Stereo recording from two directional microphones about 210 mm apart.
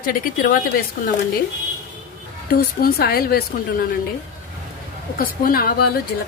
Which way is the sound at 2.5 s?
45° left (ahead or behind).